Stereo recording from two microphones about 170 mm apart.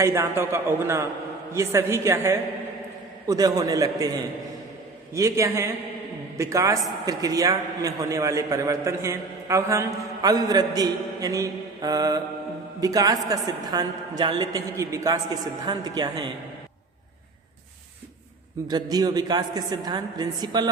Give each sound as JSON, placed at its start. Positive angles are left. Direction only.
{"t": 0.0, "sound": "a man's voice", "side_deg": -15}
{"t": 5.1, "sound": "a man's voice", "side_deg": -20}
{"t": 18.7, "sound": "a man's voice", "side_deg": -25}